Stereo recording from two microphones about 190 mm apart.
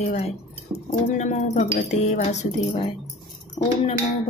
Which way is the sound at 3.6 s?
20° left (ahead or behind).